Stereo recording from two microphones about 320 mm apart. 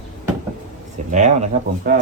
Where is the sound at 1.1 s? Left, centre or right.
Right.